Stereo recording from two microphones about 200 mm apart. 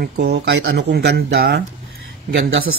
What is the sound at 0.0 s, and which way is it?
Speech, 55° right (ahead or behind).